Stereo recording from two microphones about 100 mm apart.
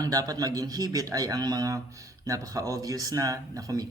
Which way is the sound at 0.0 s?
40° right (ahead or behind).